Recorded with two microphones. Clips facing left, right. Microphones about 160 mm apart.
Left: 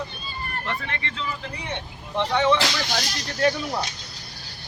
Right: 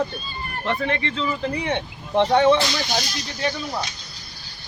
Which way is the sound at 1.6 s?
70° right (ahead or behind).